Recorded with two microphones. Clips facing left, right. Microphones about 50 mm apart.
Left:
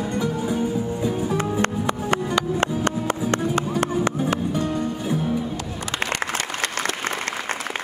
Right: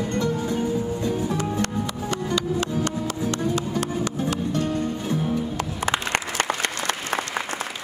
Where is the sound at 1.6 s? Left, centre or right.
Left.